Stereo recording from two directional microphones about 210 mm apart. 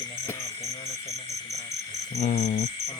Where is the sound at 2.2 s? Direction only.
30° left (ahead or behind).